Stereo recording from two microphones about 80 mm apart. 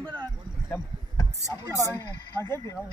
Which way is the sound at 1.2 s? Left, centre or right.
Left.